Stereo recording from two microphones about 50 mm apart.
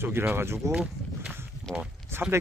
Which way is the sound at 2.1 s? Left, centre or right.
Right.